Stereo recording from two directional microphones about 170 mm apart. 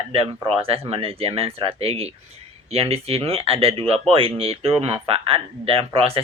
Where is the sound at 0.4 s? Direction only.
35° right (ahead or behind).